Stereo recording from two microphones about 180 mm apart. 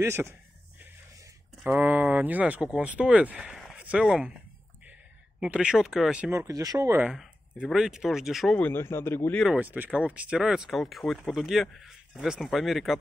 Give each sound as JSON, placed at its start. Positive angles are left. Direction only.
{"t": 0.0, "sound": "speech", "side_deg": -15}
{"t": 1.6, "sound": "speech", "side_deg": -10}
{"t": 5.4, "sound": "speech", "side_deg": -5}
{"t": 6.3, "sound": "speech", "side_deg": -20}
{"t": 7.1, "sound": "speech", "side_deg": 0}
{"t": 9.4, "sound": "speech", "side_deg": -5}